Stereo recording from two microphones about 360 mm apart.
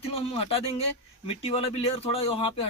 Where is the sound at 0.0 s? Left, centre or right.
Centre.